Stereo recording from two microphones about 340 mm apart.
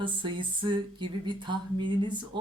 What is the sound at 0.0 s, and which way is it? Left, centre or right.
A woman's voice, centre.